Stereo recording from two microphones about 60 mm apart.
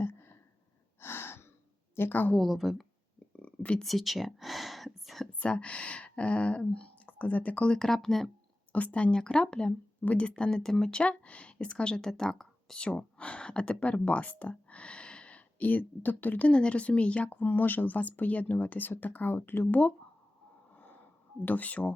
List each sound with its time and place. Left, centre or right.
0.0 s a sound: left
0.9 s gasp: left
2.0 s a woman's voice: left
2.5 s speech: centre
3.3 s a sound: centre
3.8 s speech: centre
5.3 s speech: centre
7.8 s speech: centre
8.7 s speech: left
10.0 s speech: left; by 12.8 s centre
12.8 s speech: centre
16.5 s speech: centre; by 19.8 s left
20.7 s gasp: left
21.4 s speech: left